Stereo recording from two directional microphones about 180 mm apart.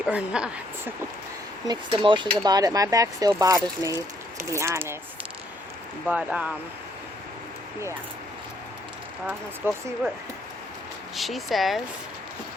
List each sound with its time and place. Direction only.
0.0 s a woman's voice: 5° right (ahead or behind)
1.6 s speech: 25° right (ahead or behind)
3.8 s speech: 20° left (ahead or behind)
4.4 s a woman's voice: 15° right (ahead or behind)
6.1 s a woman's voice: 10° right (ahead or behind)
9.6 s a woman's voice: 15° right (ahead or behind)
11.1 s speech: centre (ahead or behind)